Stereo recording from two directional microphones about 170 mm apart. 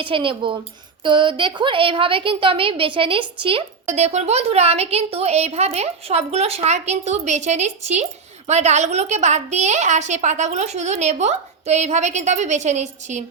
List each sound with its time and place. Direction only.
0.0 s a woman's voice: 30° right (ahead or behind)